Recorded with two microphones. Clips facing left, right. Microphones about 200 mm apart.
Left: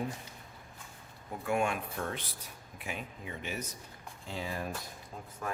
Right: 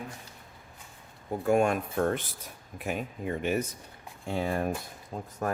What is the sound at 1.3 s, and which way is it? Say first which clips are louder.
Speech: right 7 dB; 40° right (ahead or behind).